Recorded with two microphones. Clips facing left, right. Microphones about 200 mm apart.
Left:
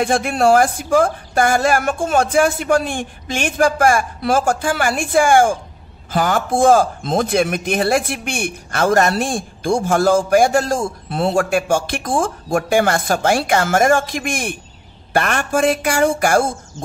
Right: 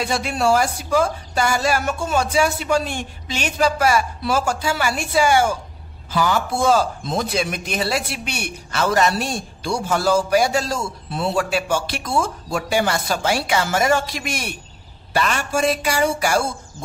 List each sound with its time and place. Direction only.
0.0 s speech: 50° left (ahead or behind)